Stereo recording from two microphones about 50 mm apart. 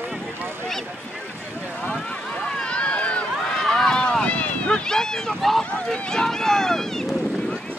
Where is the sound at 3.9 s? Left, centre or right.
Centre.